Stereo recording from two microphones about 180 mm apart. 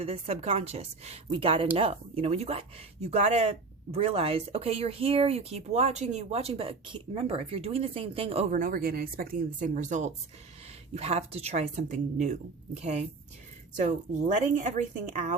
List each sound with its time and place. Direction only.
0.0 s speech: 35° right (ahead or behind)
8.5 s speech: 50° right (ahead or behind)